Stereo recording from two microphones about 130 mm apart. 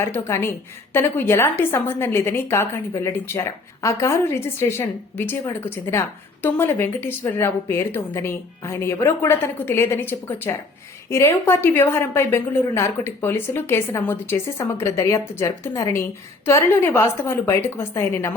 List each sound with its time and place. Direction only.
0.0 s a woman's voice: 15° left (ahead or behind)